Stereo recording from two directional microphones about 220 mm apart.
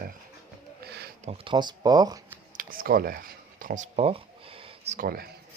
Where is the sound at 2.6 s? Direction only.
40° right (ahead or behind).